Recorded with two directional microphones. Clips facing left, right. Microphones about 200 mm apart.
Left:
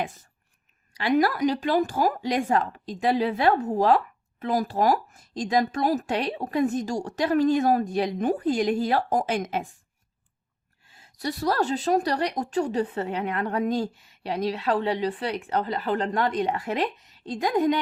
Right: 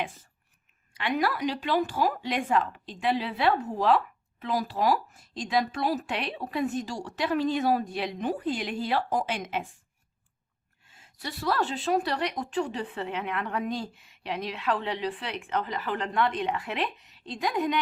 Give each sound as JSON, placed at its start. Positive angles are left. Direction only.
{"t": 0.0, "sound": "speech", "side_deg": 45}
{"t": 10.8, "sound": "a woman's voice", "side_deg": 35}